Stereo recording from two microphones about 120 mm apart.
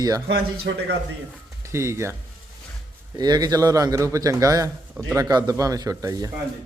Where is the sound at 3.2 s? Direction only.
35° right (ahead or behind).